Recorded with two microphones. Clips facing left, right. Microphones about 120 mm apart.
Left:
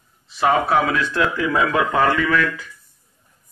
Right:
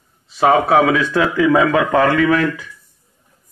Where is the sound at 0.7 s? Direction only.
90° right; by 2.3 s 60° right (ahead or behind).